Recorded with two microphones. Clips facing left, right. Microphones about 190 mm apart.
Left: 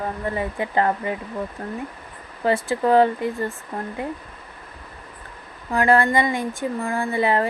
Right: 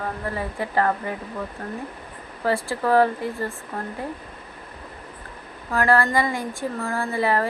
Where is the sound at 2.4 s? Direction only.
20° left (ahead or behind).